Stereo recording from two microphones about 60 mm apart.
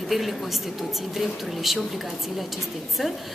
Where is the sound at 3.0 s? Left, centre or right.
Centre.